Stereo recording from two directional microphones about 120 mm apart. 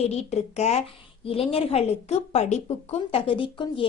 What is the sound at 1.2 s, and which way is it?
A woman's voice, 50° left (ahead or behind).